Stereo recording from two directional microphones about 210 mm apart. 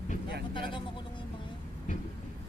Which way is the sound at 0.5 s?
25° left (ahead or behind).